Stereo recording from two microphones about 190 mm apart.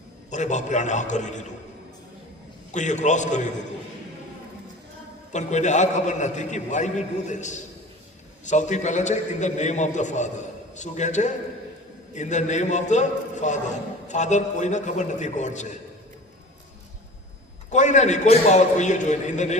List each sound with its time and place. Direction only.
0.3 s a man's voice: 40° left (ahead or behind)
2.7 s a man's voice: 40° left (ahead or behind)
5.3 s a man's voice: 40° left (ahead or behind)
17.7 s a man's voice: 40° left (ahead or behind)